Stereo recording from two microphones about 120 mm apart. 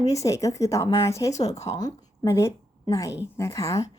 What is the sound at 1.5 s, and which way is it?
Speech, 60° left (ahead or behind).